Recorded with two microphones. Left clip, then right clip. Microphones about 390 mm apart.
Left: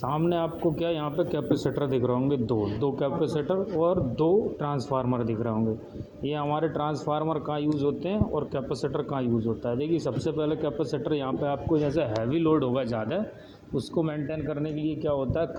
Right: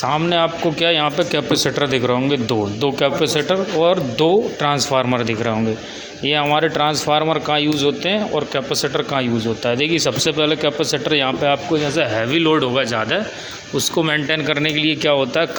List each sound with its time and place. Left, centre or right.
0.0 s a man's voice: left